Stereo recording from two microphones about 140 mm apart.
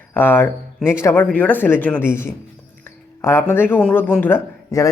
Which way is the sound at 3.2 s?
15° left (ahead or behind).